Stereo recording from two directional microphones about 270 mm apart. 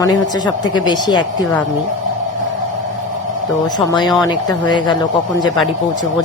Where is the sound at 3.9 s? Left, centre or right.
Centre.